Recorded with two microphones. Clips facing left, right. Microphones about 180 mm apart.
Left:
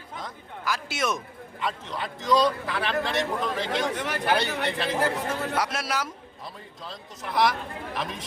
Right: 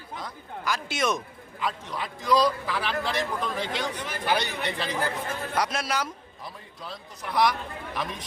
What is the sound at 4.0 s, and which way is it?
Speech, 75° left (ahead or behind).